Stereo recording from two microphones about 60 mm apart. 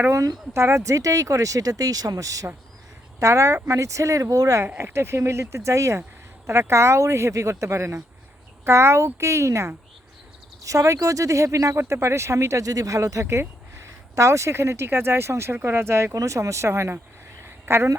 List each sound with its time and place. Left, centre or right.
0.1 s speech: right
3.2 s speech: right
4.9 s speech: right
10.6 s speech: right
12.0 s speech: right
14.2 s speech: right
16.1 s speech: right
17.4 s a sound: right